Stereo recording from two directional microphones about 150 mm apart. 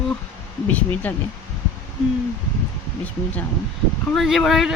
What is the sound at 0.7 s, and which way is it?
Speech, 10° left (ahead or behind).